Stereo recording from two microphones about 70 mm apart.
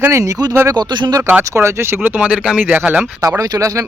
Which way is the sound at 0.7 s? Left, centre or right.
Right.